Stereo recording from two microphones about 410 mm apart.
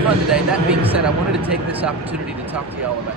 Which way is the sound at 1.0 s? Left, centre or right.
Centre.